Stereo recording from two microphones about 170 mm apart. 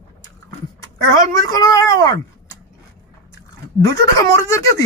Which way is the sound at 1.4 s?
20° left (ahead or behind).